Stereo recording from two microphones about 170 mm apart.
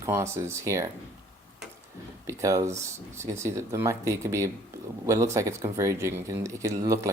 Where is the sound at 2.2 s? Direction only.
20° right (ahead or behind).